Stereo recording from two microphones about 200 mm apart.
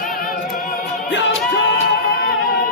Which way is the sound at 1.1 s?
65° left (ahead or behind).